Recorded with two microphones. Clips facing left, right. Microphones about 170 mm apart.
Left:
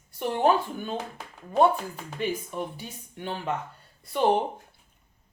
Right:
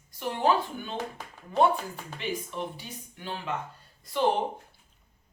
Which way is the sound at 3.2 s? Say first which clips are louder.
Left 4 dB; 55° left (ahead or behind).